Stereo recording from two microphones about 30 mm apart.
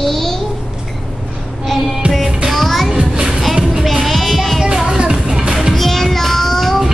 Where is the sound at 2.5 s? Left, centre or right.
Centre.